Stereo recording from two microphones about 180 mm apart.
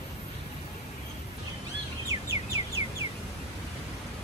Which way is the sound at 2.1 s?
15° right (ahead or behind).